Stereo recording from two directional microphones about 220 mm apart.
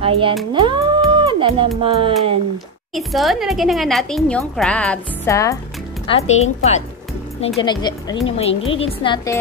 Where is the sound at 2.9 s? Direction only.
Centre (ahead or behind).